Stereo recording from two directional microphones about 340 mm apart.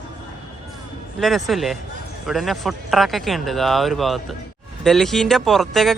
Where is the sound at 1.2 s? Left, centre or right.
Centre.